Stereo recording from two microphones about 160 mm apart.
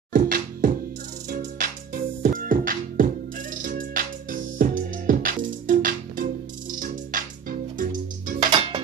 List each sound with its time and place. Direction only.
0.1 s music: 60° right (ahead or behind)
8.4 s music: 25° right (ahead or behind)